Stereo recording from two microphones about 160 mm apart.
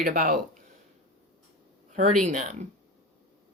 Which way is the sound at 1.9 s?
50° right (ahead or behind).